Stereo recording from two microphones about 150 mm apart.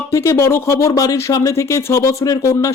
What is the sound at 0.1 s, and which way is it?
Speech, 20° left (ahead or behind).